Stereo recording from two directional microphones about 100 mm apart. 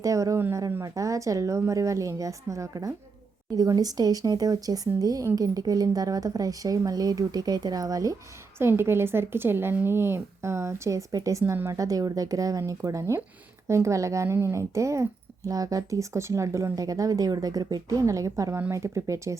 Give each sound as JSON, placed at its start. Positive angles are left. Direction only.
{"t": 0.0, "sound": "speech", "side_deg": -35}
{"t": 8.5, "sound": "speech", "side_deg": -25}